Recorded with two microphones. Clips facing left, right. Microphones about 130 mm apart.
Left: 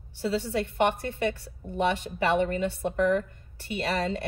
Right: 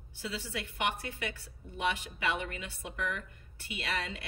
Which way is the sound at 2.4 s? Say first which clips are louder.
Left 14 dB; 45° left (ahead or behind).